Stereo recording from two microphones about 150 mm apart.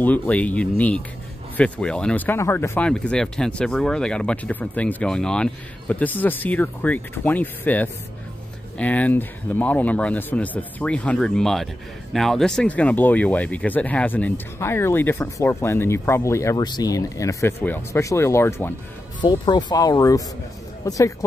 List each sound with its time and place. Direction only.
0.0 s speech: 10° left (ahead or behind)
19.2 s speech: 30° left (ahead or behind)